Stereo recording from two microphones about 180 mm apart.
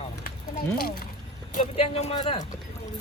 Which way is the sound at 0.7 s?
55° left (ahead or behind).